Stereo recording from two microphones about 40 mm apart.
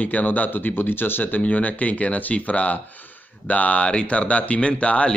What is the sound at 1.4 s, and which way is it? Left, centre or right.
Speech, left.